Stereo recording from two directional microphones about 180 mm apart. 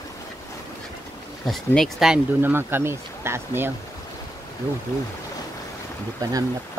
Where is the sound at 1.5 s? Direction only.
Centre (ahead or behind).